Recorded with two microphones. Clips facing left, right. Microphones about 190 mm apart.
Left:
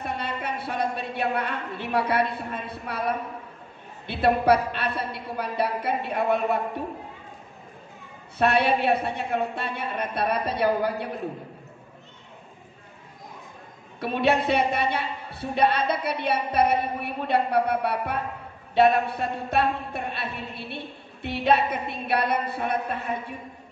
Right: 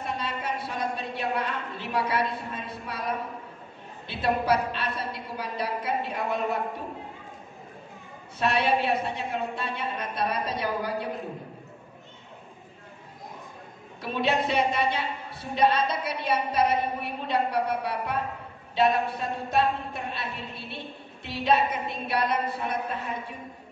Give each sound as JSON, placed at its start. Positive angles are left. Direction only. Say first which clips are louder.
{"t": 0.0, "sound": "a woman's voice", "louder": "left 1 dB", "side_deg": 60}
{"t": 4.1, "sound": "a woman's voice", "louder": "left 5 dB", "side_deg": 60}
{"t": 8.4, "sound": "a woman's voice", "louder": "left 3 dB", "side_deg": 60}
{"t": 14.0, "sound": "a woman's voice", "louder": "left 4 dB", "side_deg": 60}